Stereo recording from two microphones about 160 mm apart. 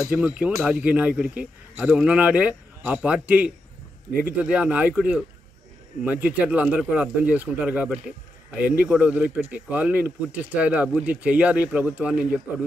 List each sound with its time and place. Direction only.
0.1 s speech: 10° right (ahead or behind)